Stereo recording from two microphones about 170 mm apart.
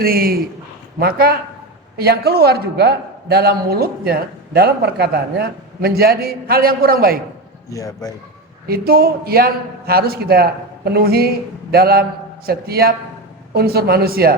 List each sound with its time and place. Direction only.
0.0 s a man's voice: 60° right (ahead or behind)
7.7 s a man's voice: 20° left (ahead or behind)
8.6 s a man's voice: 65° right (ahead or behind)